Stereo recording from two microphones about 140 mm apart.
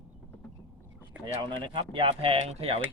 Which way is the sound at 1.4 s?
35° right (ahead or behind).